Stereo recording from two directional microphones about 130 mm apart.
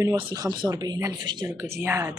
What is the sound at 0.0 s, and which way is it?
Speech, 25° right (ahead or behind).